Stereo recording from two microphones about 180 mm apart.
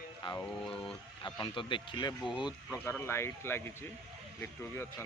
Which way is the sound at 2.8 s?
15° left (ahead or behind).